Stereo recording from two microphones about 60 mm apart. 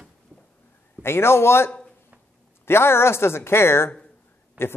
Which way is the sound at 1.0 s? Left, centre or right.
Left.